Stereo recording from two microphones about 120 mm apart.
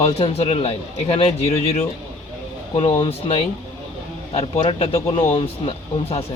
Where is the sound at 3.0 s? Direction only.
50° left (ahead or behind).